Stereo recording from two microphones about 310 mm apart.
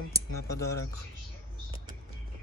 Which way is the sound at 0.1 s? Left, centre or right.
Centre.